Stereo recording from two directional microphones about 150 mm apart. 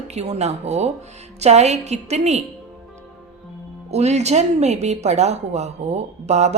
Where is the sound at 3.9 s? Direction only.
45° right (ahead or behind).